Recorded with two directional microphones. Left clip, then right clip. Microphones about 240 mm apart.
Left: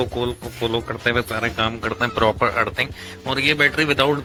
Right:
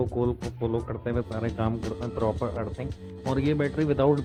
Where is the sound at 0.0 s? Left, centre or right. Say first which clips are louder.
Left 4 dB; centre.